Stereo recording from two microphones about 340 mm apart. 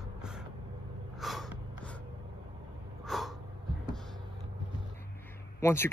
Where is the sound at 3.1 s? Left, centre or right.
Centre.